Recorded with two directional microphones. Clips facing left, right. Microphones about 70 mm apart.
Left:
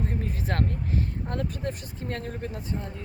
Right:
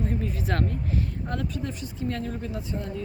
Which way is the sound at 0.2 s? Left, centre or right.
Left.